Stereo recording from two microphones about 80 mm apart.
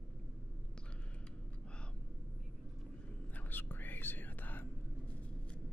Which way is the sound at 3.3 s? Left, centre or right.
Left.